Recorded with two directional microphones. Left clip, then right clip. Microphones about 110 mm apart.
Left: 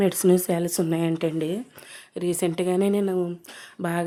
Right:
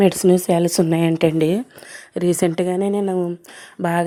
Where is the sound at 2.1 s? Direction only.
65° right (ahead or behind).